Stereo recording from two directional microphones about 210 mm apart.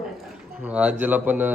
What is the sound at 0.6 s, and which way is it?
Speech, 5° right (ahead or behind).